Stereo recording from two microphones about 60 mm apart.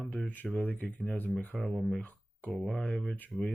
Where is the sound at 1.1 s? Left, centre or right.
Left.